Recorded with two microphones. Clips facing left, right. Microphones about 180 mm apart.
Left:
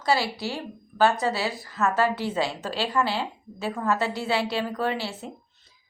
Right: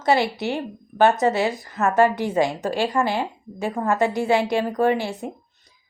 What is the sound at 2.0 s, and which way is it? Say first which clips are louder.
Speech: right 4 dB; 15° right (ahead or behind).